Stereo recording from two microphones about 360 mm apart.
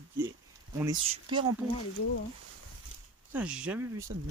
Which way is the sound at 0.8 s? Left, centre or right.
Centre.